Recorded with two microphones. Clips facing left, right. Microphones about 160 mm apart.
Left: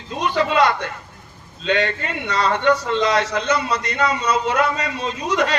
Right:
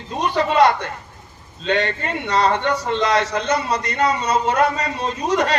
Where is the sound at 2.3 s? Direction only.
40° right (ahead or behind).